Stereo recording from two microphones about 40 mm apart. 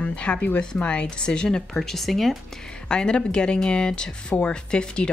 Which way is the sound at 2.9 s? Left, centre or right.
Left.